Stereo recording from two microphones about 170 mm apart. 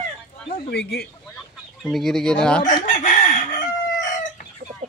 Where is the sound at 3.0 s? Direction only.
50° left (ahead or behind).